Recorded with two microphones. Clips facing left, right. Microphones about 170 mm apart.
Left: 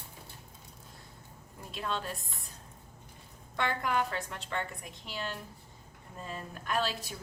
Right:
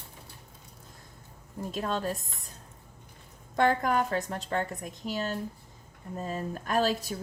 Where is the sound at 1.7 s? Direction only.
40° right (ahead or behind).